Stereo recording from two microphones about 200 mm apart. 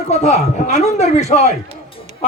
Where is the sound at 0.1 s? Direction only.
35° left (ahead or behind).